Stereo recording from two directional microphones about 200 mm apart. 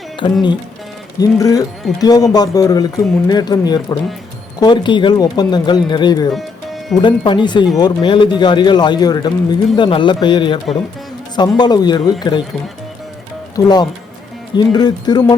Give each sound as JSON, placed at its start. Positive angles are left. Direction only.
{"t": 0.2, "sound": "music", "side_deg": 25}
{"t": 1.2, "sound": "speech", "side_deg": 15}
{"t": 13.6, "sound": "speech", "side_deg": 20}